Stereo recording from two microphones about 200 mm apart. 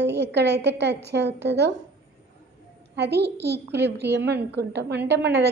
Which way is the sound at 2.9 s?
55° right (ahead or behind).